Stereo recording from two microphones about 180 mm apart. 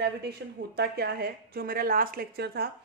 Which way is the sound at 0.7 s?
60° right (ahead or behind).